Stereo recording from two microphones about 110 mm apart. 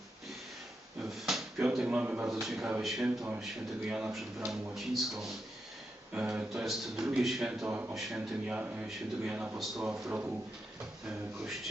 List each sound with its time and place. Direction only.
1.0 s drawer open or close: centre (ahead or behind)
1.6 s a man's voice: 10° right (ahead or behind)